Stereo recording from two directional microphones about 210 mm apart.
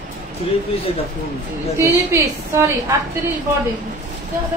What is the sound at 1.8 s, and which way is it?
Speech, 15° right (ahead or behind).